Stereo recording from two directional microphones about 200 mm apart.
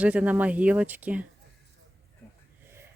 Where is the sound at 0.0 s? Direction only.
5° right (ahead or behind).